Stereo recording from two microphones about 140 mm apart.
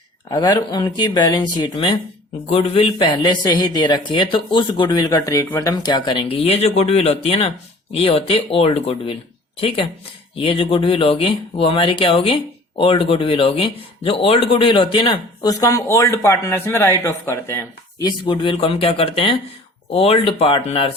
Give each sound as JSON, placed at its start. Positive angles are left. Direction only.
{"t": 0.3, "sound": "speech", "side_deg": 30}
{"t": 18.0, "sound": "speech", "side_deg": 35}